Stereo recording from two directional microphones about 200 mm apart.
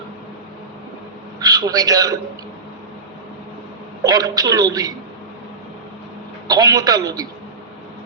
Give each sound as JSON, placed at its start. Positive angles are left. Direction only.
{"t": 1.4, "sound": "a man's voice", "side_deg": -20}
{"t": 4.0, "sound": "a woman's voice", "side_deg": -20}
{"t": 6.5, "sound": "a woman's voice", "side_deg": -20}